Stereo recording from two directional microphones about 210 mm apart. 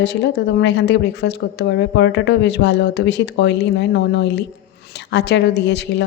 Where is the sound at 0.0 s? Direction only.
55° left (ahead or behind).